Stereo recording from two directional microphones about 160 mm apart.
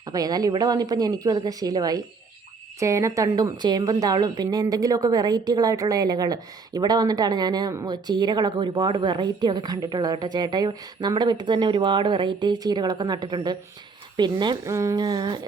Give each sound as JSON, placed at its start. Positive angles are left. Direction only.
{"t": 0.1, "sound": "a woman's voice", "side_deg": -25}